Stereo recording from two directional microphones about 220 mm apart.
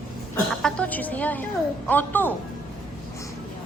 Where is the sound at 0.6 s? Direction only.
5° left (ahead or behind).